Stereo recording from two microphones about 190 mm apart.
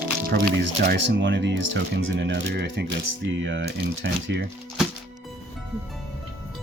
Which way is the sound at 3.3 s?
75° right (ahead or behind).